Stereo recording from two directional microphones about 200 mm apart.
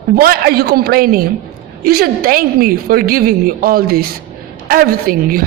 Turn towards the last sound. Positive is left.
turn(degrees=-45)  # may be behind; listen again after turning